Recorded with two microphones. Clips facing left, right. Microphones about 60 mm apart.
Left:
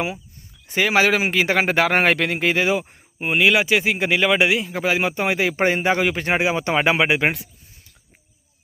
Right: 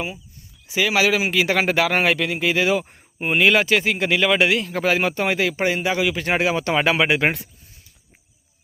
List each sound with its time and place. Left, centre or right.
0.7 s speech: left
2.5 s speech: left
2.8 s speech: centre; by 5.5 s left
5.5 s speech: left
6.2 s speech: centre
7.3 s speech: centre